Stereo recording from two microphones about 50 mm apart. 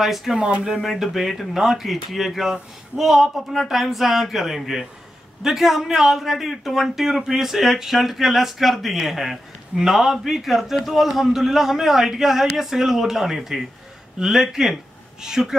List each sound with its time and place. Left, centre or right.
0.0 s speech: centre
0.4 s speech: right
0.9 s speech: centre